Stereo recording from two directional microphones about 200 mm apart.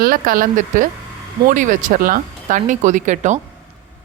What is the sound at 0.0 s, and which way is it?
A woman's voice, 45° right (ahead or behind).